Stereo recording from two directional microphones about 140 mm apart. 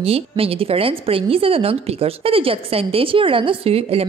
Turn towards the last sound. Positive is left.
turn(degrees=-45)  # may be behind; listen again after turning